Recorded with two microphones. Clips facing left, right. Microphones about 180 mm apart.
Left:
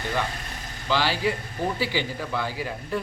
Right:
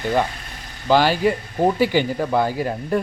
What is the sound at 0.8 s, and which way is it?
Speech, 50° right (ahead or behind).